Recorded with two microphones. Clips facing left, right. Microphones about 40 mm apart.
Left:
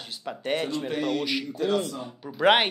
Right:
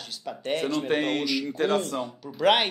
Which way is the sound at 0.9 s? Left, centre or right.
Right.